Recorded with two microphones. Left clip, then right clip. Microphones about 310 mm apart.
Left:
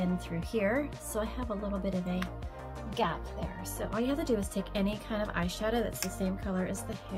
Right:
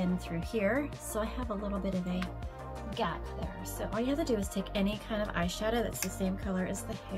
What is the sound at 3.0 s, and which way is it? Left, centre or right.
A woman's voice, centre.